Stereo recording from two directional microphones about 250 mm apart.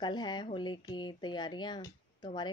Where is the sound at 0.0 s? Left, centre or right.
Centre.